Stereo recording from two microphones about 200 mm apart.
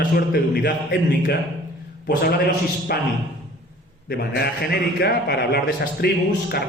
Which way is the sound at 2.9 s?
50° left (ahead or behind).